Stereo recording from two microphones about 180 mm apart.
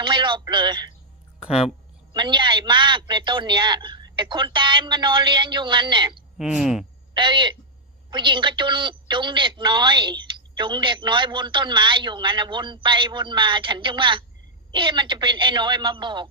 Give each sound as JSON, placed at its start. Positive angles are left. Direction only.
{"t": 0.0, "sound": "a man's voice", "side_deg": -25}
{"t": 1.4, "sound": "speech", "side_deg": -5}
{"t": 2.1, "sound": "speech", "side_deg": -25}
{"t": 6.3, "sound": "speech", "side_deg": 0}
{"t": 7.1, "sound": "speech", "side_deg": -25}